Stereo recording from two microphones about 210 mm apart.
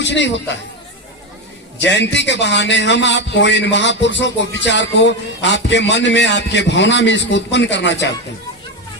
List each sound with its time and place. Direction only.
0.0 s a man's voice: 55° left (ahead or behind)
1.8 s a man's voice: 55° left (ahead or behind)